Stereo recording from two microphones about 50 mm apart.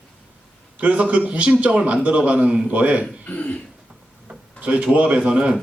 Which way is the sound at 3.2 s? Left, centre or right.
Left.